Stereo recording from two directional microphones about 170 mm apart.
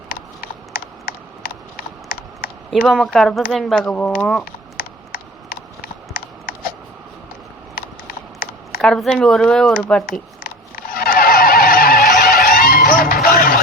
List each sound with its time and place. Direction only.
0.1 s typing: 55° left (ahead or behind)
2.8 s speech: centre (ahead or behind)
4.8 s a sound: 55° left (ahead or behind)
8.8 s speech: 5° left (ahead or behind)
10.1 s neigh: 55° left (ahead or behind)
12.5 s music: 60° left (ahead or behind)